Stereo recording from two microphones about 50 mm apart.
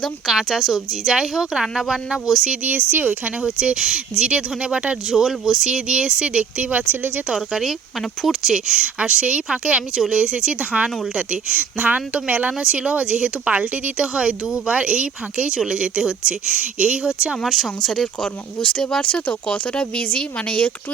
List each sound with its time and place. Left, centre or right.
0.3 s a woman's voice: centre
2.9 s speech: right
3.4 s speech: centre
5.0 s speech: centre
6.6 s speech: right
7.3 s speech: centre; by 17.3 s right
17.4 s a woman's voice: centre
18.2 s speech: centre